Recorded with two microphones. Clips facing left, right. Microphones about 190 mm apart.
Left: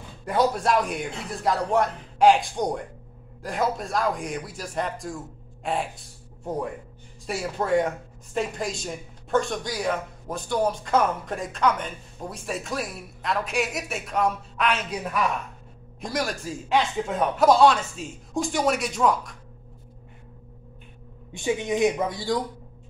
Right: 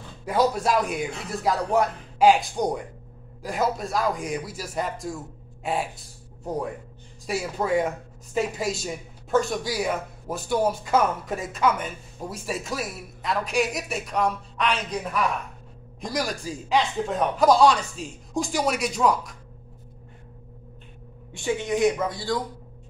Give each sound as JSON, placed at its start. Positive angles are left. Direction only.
{"t": 0.2, "sound": "speech", "side_deg": 0}
{"t": 21.3, "sound": "speech", "side_deg": 15}